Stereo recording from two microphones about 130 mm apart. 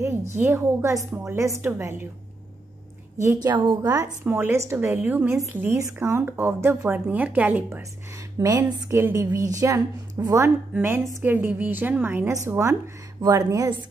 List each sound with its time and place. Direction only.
0.4 s speech: 20° right (ahead or behind)
3.2 s speech: 25° right (ahead or behind); by 7.8 s 10° right (ahead or behind)
8.4 s speech: 25° right (ahead or behind)